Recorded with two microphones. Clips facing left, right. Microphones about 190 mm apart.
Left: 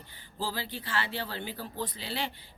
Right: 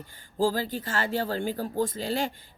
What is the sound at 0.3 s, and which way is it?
Speech, 45° right (ahead or behind).